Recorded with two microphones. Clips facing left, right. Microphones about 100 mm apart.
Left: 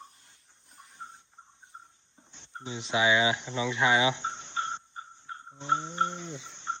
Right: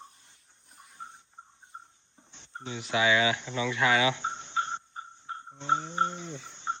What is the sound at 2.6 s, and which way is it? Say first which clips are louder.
Speech: even; 20° left (ahead or behind).